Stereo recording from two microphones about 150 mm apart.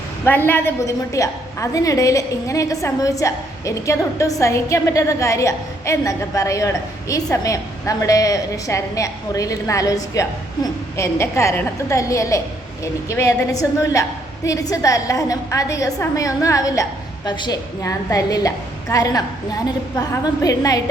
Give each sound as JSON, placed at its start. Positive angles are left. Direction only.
{"t": 0.3, "sound": "a woman's voice", "side_deg": 15}